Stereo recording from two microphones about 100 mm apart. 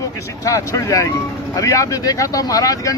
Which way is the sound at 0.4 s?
35° left (ahead or behind).